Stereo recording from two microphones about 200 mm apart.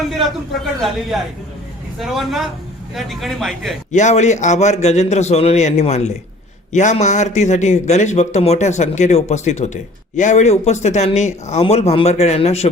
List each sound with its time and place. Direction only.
0.0 s a man's voice: centre (ahead or behind)
3.9 s a man's voice: 35° left (ahead or behind)